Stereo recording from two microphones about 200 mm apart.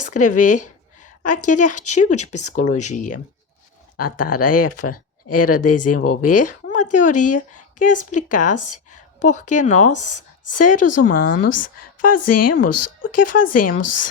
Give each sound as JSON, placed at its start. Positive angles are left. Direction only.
{"t": 0.1, "sound": "a woman's voice", "side_deg": 40}